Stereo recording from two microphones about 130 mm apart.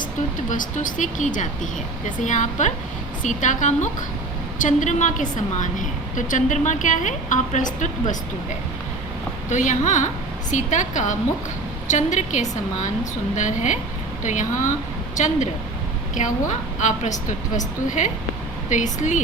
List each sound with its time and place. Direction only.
0.5 s a woman's voice: 90° left; by 8.1 s 75° left (ahead or behind)
9.5 s a woman's voice: 70° left (ahead or behind)
16.1 s a woman's voice: 70° left (ahead or behind)